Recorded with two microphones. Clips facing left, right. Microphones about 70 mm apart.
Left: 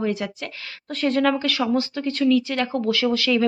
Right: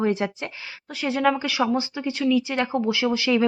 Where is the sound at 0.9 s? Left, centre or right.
Centre.